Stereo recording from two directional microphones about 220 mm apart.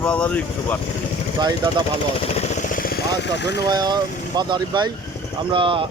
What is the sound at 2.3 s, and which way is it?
Vehicle, 30° left (ahead or behind).